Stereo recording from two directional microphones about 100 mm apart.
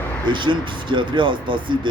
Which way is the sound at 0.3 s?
55° right (ahead or behind).